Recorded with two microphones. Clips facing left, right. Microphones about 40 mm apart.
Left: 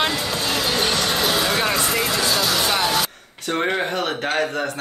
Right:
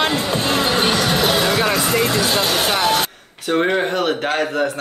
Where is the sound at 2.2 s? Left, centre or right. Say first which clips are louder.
Right 2 dB; right.